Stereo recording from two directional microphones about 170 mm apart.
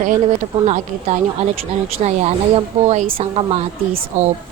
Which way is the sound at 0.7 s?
40° right (ahead or behind).